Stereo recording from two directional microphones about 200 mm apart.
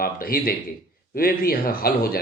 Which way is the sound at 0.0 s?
50° left (ahead or behind).